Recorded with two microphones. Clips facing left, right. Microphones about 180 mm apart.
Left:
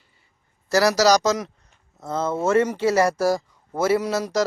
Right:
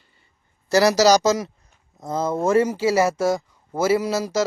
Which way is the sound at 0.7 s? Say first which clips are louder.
Right 2 dB; centre (ahead or behind).